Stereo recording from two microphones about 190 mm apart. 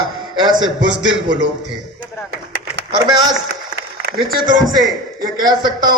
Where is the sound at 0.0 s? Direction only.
25° right (ahead or behind).